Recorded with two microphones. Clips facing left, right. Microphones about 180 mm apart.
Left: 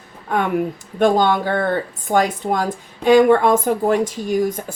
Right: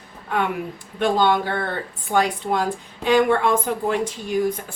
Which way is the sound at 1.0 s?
45° left (ahead or behind).